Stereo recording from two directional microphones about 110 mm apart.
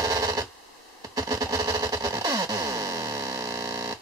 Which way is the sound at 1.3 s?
30° right (ahead or behind).